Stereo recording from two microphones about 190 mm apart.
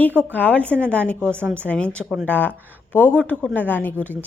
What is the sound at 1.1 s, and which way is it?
Speech, 10° right (ahead or behind).